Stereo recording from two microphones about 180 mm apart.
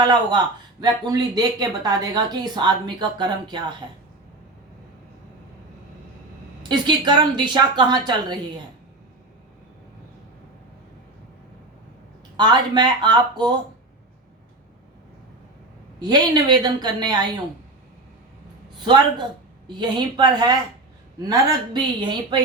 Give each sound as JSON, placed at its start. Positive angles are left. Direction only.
{"t": 0.0, "sound": "speech", "side_deg": -25}
{"t": 6.6, "sound": "speech", "side_deg": -25}
{"t": 12.4, "sound": "speech", "side_deg": -25}
{"t": 16.0, "sound": "speech", "side_deg": -20}
{"t": 18.8, "sound": "speech", "side_deg": -25}